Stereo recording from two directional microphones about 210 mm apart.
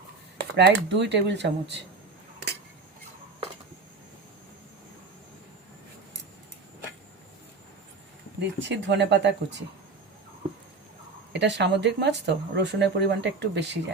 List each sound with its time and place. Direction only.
0.3 s speech: 55° right (ahead or behind)
8.4 s speech: 55° right (ahead or behind)
11.3 s speech: 55° right (ahead or behind)